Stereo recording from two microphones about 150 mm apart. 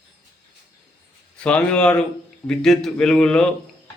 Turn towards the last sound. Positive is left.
turn(degrees=5)  # may be behind; listen again after turning